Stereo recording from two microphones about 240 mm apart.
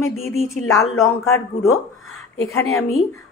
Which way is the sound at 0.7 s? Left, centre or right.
Left.